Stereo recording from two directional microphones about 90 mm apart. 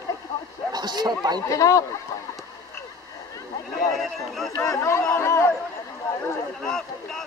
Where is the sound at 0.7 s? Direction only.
50° right (ahead or behind).